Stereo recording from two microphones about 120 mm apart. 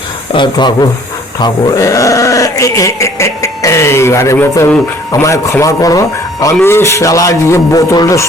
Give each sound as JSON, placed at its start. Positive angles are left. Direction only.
{"t": 0.3, "sound": "speech", "side_deg": 40}
{"t": 1.4, "sound": "speech", "side_deg": 30}